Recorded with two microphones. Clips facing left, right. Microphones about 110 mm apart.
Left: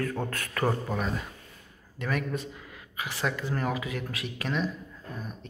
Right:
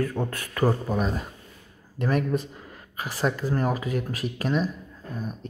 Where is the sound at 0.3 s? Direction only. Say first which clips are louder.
Right 4 dB; 15° right (ahead or behind).